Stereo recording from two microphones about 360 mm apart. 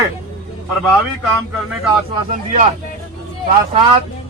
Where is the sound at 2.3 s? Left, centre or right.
Centre.